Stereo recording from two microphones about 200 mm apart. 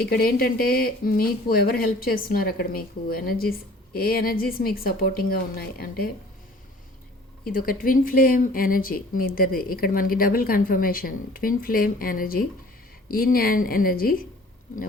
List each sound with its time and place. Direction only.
0.2 s speech: 50° left (ahead or behind)
7.4 s speech: 45° left (ahead or behind)